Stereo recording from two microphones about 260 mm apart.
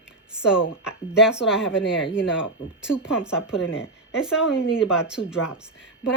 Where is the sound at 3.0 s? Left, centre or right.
Centre.